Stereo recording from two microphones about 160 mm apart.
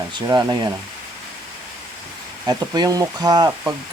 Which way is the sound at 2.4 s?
20° right (ahead or behind).